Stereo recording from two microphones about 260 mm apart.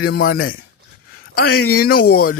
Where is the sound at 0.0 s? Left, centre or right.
Left.